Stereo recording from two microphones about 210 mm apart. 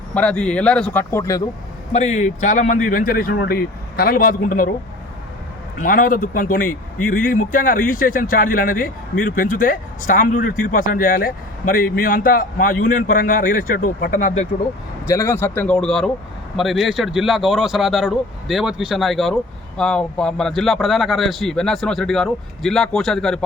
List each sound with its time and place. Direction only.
0.1 s speech: 5° left (ahead or behind)
1.9 s a man's voice: 30° left (ahead or behind)
5.8 s a man's voice: 40° left (ahead or behind)
15.0 s speech: 15° left (ahead or behind)